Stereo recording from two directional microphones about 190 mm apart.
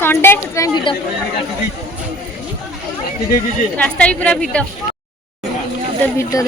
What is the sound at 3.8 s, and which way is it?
Speech, 5° left (ahead or behind).